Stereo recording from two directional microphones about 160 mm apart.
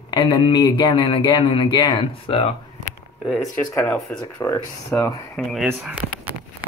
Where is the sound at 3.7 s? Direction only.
20° left (ahead or behind).